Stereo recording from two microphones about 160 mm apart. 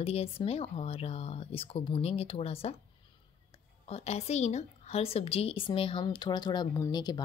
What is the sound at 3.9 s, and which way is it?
A woman's voice, 40° left (ahead or behind).